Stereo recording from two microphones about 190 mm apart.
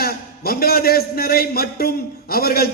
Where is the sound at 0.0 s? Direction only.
55° left (ahead or behind).